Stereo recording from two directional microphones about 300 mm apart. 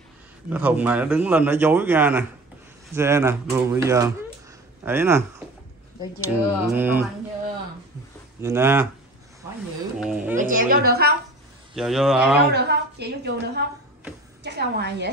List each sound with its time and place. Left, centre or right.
0.5 s a man's voice: centre
6.2 s speech: centre
8.4 s speech: centre
9.9 s a man's voice: centre
10.3 s a woman's voice: right
11.7 s a man's voice: centre
12.4 s a woman's voice: right